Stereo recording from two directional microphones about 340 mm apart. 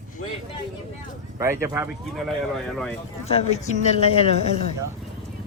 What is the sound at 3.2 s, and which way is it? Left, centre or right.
Speech, centre.